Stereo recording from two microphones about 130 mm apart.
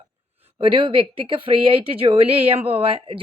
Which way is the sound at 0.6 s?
40° right (ahead or behind).